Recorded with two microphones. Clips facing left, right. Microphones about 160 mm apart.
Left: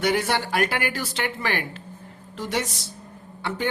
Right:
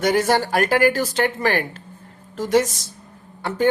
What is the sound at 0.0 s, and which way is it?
A woman's voice, 40° right (ahead or behind).